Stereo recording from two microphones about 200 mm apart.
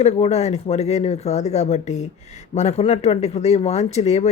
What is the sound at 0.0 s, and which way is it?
Speech, 35° left (ahead or behind).